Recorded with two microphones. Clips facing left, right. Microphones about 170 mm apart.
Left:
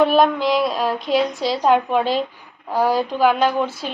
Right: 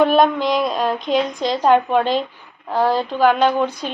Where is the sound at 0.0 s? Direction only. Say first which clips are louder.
Right 1 dB; centre (ahead or behind).